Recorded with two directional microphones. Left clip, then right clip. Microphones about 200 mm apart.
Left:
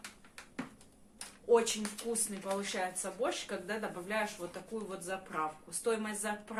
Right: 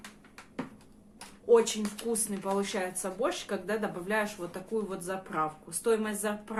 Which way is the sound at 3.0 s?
35° right (ahead or behind).